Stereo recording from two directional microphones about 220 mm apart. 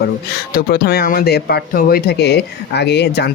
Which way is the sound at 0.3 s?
45° left (ahead or behind).